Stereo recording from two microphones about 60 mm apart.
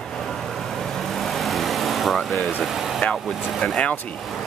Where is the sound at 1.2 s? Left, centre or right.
Centre.